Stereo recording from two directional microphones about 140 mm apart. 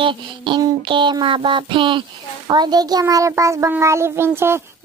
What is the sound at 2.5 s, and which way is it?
A child's voice, 30° right (ahead or behind).